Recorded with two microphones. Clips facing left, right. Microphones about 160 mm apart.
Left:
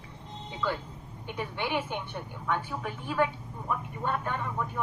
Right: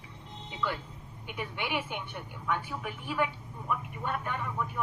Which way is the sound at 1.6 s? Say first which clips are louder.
Left 3 dB; 30° left (ahead or behind).